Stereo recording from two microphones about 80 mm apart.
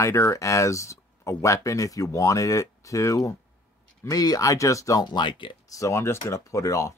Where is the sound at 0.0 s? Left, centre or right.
Left.